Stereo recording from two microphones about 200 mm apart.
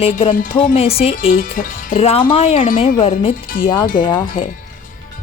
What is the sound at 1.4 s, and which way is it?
A woman's voice, 40° left (ahead or behind).